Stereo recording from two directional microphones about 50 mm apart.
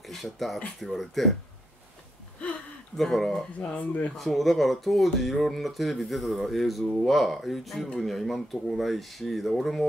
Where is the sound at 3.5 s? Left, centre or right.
Left.